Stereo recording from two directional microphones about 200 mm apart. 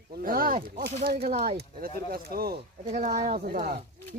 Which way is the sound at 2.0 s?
45° right (ahead or behind).